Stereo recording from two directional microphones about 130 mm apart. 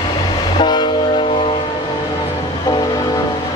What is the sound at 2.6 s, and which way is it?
Train, 30° left (ahead or behind).